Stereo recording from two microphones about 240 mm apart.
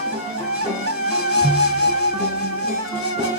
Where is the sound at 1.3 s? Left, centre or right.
Left.